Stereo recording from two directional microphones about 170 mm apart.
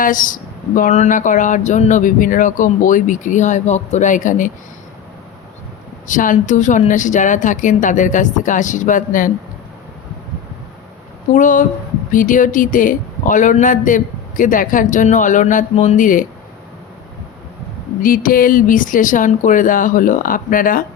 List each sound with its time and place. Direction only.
0.0 s a man's voice: 50° left (ahead or behind)
6.1 s a man's voice: 50° left (ahead or behind)
11.3 s a man's voice: 50° left (ahead or behind)
18.0 s a man's voice: 55° left (ahead or behind)